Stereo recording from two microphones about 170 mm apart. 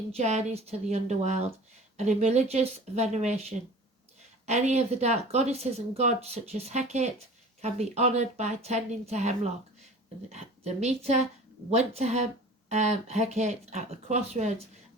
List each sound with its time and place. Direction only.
0.1 s speech: 40° right (ahead or behind)
4.4 s speech: 40° right (ahead or behind)